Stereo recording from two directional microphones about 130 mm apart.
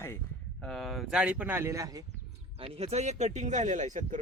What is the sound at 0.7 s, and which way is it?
Speech, centre (ahead or behind).